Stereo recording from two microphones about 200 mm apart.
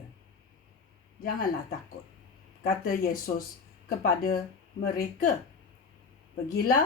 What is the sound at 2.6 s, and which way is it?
Speech, 45° left (ahead or behind).